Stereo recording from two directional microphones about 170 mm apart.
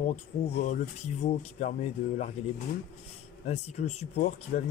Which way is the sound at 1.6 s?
40° left (ahead or behind).